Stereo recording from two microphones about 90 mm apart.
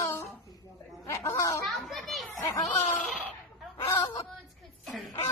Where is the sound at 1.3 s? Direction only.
35° left (ahead or behind).